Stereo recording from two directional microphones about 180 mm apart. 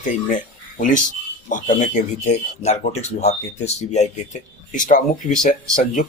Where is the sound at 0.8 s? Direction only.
45° left (ahead or behind).